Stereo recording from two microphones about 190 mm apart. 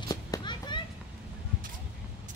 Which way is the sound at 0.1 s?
20° left (ahead or behind).